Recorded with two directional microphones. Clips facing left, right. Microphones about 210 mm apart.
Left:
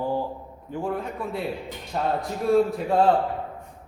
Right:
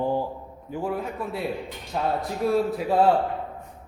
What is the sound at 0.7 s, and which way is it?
A man's voice, 5° right (ahead or behind).